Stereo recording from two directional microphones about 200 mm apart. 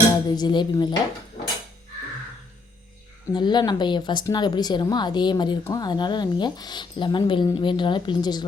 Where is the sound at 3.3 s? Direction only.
20° left (ahead or behind).